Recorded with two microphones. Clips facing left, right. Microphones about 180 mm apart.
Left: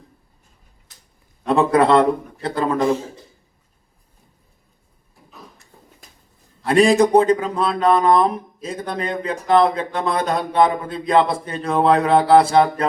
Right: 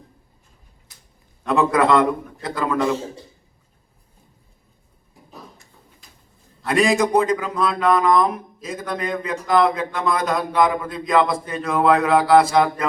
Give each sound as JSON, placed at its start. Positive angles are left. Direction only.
{"t": 1.5, "sound": "speech", "side_deg": 30}
{"t": 6.7, "sound": "speech", "side_deg": 30}